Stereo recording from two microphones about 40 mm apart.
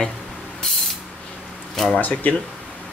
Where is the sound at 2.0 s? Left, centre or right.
Left.